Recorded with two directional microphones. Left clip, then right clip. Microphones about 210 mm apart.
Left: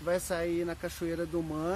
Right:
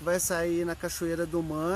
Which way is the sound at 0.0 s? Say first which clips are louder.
Right 3 dB; 45° right (ahead or behind).